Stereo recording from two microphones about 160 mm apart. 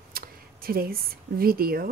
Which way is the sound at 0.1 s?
65° right (ahead or behind).